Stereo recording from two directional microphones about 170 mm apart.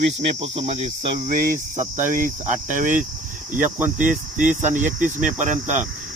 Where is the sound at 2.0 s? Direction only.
50° right (ahead or behind).